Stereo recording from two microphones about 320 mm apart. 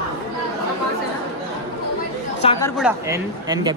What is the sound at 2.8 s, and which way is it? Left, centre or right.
Speech, centre.